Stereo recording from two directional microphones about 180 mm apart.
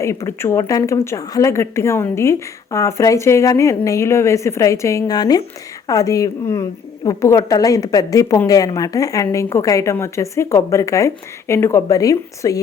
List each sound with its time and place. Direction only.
0.0 s a woman's voice: 15° left (ahead or behind)